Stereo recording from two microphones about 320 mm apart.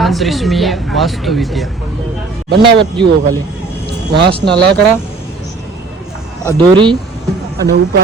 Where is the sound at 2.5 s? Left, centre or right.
Centre.